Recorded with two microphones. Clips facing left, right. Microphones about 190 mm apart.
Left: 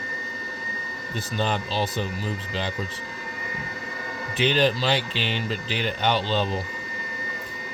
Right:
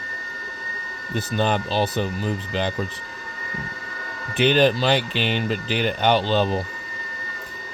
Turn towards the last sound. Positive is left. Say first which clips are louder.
# right 5 dB
turn(degrees=-55)  # may be behind; listen again after turning